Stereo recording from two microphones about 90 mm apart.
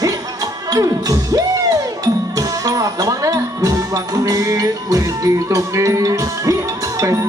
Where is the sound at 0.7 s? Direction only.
40° right (ahead or behind).